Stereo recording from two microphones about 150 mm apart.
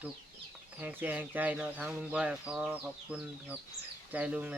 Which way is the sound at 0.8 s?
10° right (ahead or behind).